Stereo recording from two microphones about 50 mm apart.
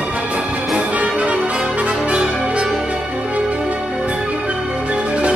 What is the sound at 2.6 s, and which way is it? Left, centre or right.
Music, centre.